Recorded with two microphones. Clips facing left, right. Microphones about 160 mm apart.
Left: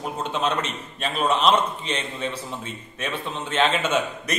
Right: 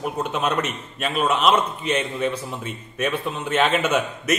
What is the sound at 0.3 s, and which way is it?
A man's voice, 10° right (ahead or behind).